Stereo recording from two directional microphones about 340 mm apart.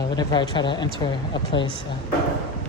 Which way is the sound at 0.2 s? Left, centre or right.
Centre.